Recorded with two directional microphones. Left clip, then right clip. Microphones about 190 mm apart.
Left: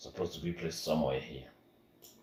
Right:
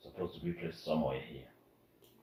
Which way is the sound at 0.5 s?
45° left (ahead or behind).